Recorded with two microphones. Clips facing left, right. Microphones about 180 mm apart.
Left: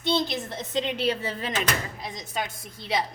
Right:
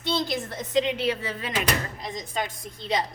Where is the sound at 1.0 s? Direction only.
30° left (ahead or behind).